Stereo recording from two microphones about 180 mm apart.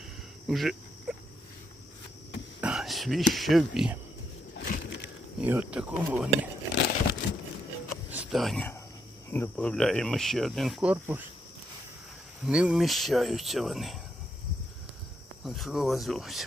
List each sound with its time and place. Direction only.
0.4 s a sound: centre (ahead or behind)
2.6 s a sound: 5° right (ahead or behind)
3.3 s speech: centre (ahead or behind)
4.5 s a sound: 50° left (ahead or behind)
5.4 s speech: 10° right (ahead or behind)
6.7 s crumpling: 70° left (ahead or behind)
8.1 s speech: 5° right (ahead or behind)
12.5 s speech: 5° right (ahead or behind)
15.4 s speech: centre (ahead or behind)